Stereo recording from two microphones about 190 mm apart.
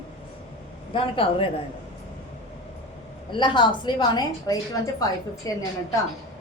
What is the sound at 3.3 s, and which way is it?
A woman's voice, 25° left (ahead or behind).